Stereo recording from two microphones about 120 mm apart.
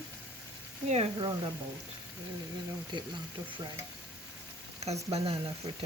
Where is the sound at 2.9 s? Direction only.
40° right (ahead or behind).